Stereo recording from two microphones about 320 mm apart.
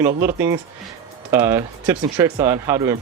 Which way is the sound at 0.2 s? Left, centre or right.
Centre.